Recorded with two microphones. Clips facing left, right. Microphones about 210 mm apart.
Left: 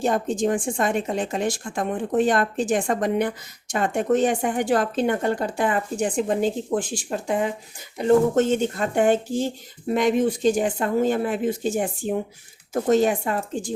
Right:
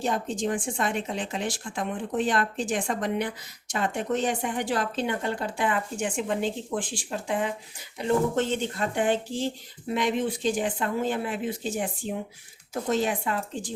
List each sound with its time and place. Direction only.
0.0 s speech: 50° left (ahead or behind)